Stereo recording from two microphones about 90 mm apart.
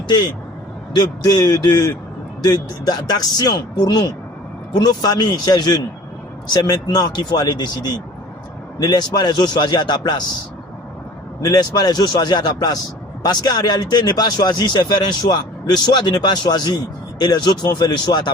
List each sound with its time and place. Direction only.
0.9 s speech: 50° left (ahead or behind)
11.4 s speech: 45° left (ahead or behind)